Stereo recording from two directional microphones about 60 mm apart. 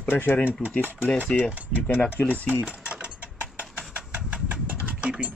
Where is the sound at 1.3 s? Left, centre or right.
Left.